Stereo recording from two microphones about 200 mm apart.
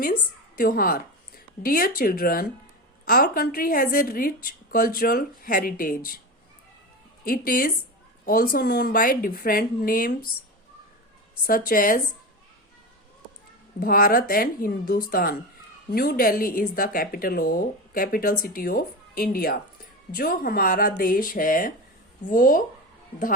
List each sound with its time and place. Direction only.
0.0 s a woman's voice: 45° left (ahead or behind)
7.3 s a woman's voice: 45° left (ahead or behind)
11.4 s a woman's voice: 45° left (ahead or behind)
13.7 s a woman's voice: 45° left (ahead or behind)